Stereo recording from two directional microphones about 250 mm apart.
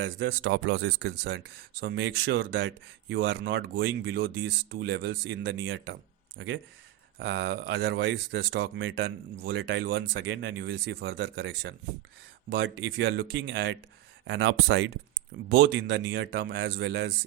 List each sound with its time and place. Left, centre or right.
0.0 s speech: right
15.6 s speech: right